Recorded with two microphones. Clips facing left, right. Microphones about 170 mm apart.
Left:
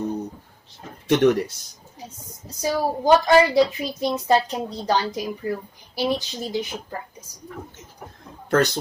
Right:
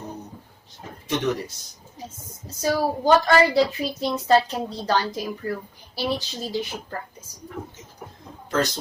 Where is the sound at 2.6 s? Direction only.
15° left (ahead or behind).